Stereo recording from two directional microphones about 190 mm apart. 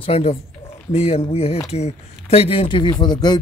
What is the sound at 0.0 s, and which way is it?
A man's voice, 30° left (ahead or behind).